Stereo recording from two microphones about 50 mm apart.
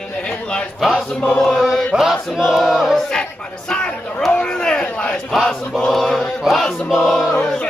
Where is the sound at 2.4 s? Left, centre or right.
Centre.